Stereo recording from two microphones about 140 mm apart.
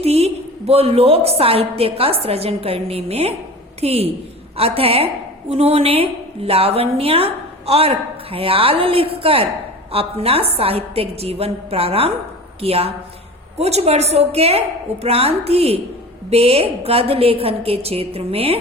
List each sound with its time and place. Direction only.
0.0 s a woman's voice: 45° right (ahead or behind)